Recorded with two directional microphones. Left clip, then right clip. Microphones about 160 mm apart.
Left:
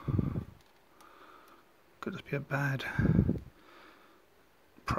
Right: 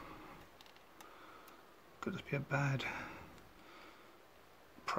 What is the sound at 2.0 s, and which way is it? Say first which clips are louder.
Speech: left 4 dB; 25° left (ahead or behind).